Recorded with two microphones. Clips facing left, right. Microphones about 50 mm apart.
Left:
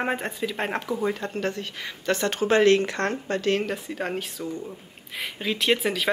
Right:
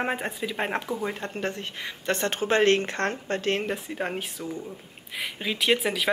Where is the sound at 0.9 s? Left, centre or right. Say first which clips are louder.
Left 3 dB; left.